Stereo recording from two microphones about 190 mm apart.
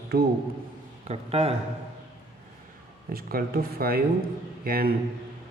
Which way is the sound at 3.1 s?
50° right (ahead or behind).